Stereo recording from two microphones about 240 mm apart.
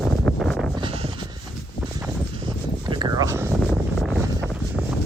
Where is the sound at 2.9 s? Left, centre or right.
Centre.